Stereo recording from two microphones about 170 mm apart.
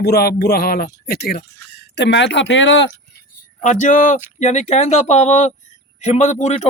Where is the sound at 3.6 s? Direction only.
45° left (ahead or behind).